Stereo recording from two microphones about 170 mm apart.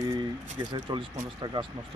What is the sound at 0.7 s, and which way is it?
Speech, 25° right (ahead or behind).